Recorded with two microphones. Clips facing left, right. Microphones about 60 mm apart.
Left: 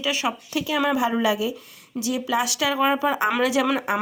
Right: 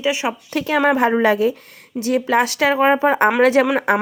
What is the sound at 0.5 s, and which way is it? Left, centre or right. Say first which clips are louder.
A woman's voice: right 7 dB; right.